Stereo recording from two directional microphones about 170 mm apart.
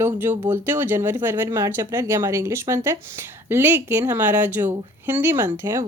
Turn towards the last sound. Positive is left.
turn(degrees=-15)  # may be behind; listen again after turning